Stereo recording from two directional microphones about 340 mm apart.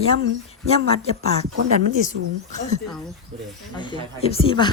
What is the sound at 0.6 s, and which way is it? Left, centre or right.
Speech, centre.